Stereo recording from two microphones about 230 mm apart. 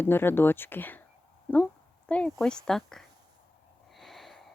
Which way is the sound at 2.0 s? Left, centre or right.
Centre.